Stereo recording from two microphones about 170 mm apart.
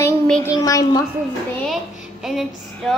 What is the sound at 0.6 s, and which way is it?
Speech, 20° left (ahead or behind).